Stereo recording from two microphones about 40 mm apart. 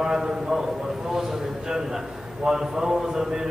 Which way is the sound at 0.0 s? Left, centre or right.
Centre.